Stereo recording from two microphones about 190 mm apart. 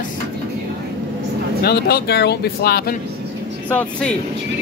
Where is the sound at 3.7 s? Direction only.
5° left (ahead or behind).